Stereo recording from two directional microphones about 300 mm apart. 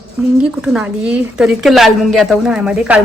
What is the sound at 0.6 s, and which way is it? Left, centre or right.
A woman's voice, centre.